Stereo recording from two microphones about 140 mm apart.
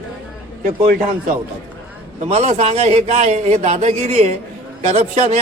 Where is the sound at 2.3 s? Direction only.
50° right (ahead or behind).